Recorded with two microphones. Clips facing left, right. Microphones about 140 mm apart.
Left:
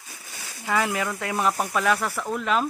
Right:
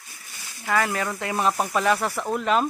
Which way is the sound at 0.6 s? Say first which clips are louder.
Right 1 dB; 15° left (ahead or behind).